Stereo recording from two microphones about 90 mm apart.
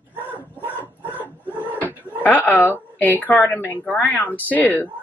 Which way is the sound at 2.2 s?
20° left (ahead or behind).